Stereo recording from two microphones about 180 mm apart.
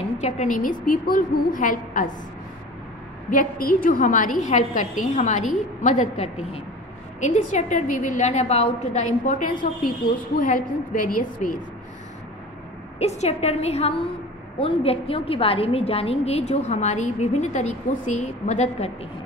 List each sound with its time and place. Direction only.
0.2 s a woman's voice: 45° left (ahead or behind)
3.3 s a woman's voice: 50° left (ahead or behind)
13.0 s a woman's voice: 40° left (ahead or behind)